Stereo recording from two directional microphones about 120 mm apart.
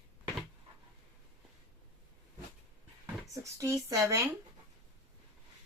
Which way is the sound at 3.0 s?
25° right (ahead or behind).